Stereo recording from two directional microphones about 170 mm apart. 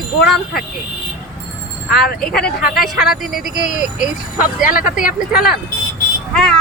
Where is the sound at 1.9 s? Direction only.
65° left (ahead or behind).